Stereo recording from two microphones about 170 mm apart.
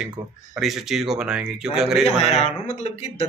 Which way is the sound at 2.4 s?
40° left (ahead or behind).